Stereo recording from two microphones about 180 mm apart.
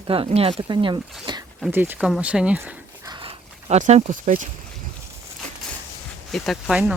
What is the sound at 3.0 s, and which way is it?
Dog, 25° right (ahead or behind).